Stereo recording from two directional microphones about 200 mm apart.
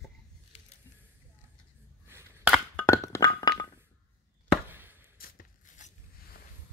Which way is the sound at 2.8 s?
15° left (ahead or behind).